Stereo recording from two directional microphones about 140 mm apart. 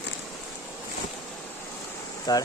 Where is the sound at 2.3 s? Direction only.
25° left (ahead or behind).